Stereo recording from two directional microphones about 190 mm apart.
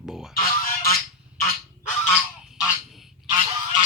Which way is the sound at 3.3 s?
25° right (ahead or behind).